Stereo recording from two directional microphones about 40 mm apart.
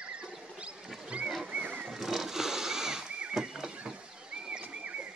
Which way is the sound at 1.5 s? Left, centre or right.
Right.